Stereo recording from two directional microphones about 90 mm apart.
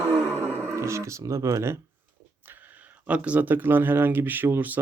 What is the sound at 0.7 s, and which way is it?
Speech, 30° right (ahead or behind).